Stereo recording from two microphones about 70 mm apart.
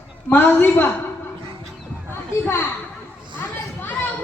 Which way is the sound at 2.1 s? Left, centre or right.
Left.